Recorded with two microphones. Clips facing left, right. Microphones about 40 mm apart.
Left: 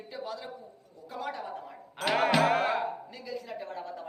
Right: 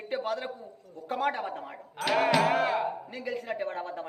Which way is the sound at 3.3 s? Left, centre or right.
Right.